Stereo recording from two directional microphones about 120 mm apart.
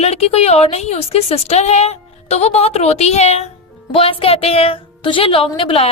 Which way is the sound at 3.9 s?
50° left (ahead or behind).